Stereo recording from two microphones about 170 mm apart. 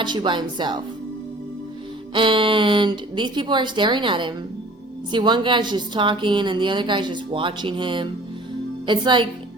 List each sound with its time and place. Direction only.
0.0 s a woman's voice: 25° right (ahead or behind)
2.1 s a woman's voice: 30° right (ahead or behind)